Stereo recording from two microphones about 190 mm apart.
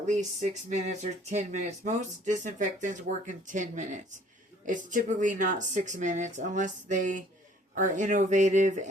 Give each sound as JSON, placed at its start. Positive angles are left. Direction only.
{"t": 0.0, "sound": "speech", "side_deg": -40}